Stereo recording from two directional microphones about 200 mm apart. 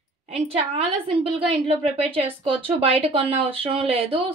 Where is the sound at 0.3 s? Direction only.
30° right (ahead or behind).